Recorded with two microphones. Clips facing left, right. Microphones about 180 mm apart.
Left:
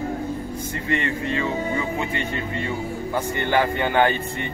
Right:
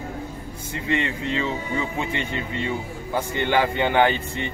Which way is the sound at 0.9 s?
20° right (ahead or behind).